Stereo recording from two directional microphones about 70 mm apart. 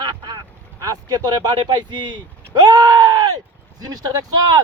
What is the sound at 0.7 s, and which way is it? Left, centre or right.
Speech, right.